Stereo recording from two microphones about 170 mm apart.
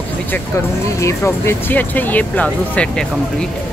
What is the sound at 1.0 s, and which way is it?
Speech, 15° left (ahead or behind).